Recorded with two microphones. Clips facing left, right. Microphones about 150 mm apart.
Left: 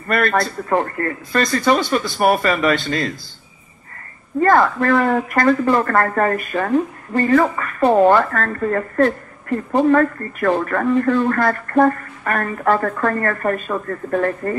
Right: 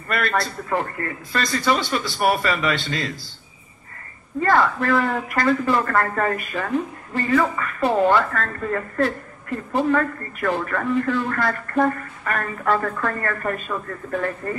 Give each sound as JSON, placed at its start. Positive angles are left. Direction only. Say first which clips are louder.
{"t": 0.1, "sound": "speech", "louder": "left 5 dB", "side_deg": 50}
{"t": 4.4, "sound": "speech", "louder": "left 4 dB", "side_deg": 45}